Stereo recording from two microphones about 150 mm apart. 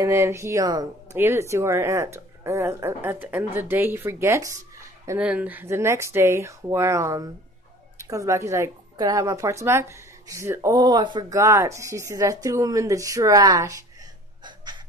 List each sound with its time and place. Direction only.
0.0 s speech: 20° right (ahead or behind)
5.2 s speech: 10° right (ahead or behind)
14.4 s a sound: 30° right (ahead or behind)